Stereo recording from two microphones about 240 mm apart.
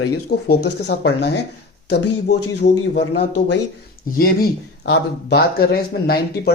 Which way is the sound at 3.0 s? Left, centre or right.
Left.